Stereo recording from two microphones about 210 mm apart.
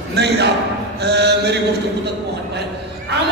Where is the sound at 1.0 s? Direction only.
50° right (ahead or behind).